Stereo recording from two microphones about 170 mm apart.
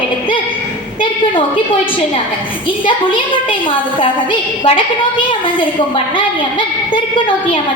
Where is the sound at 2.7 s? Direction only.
30° left (ahead or behind).